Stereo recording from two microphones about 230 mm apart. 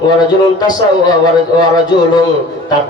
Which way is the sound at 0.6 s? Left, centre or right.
Centre.